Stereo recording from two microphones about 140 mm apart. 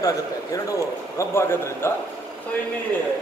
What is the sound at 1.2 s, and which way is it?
Speech, 20° left (ahead or behind).